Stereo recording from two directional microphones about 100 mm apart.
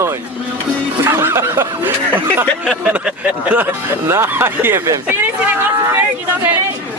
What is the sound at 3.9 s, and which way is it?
Speech, 25° right (ahead or behind).